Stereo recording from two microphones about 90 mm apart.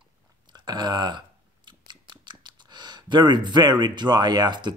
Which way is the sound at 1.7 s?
55° right (ahead or behind).